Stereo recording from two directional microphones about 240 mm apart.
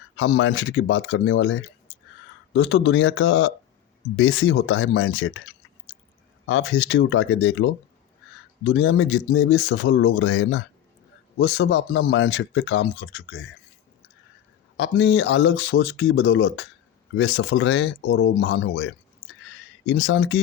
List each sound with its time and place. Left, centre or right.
0.2 s speech: left
6.4 s speech: left
14.8 s speech: left
19.3 s a sound: left